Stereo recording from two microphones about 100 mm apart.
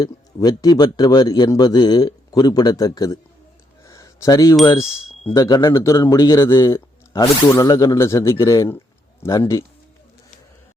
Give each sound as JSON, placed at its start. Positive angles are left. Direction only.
{"t": 0.0, "sound": "a man's voice", "side_deg": 40}
{"t": 3.8, "sound": "a sound", "side_deg": 35}
{"t": 5.3, "sound": "a man's voice", "side_deg": 40}